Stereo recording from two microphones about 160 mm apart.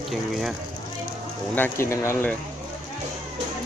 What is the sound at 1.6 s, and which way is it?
Speech, 15° left (ahead or behind).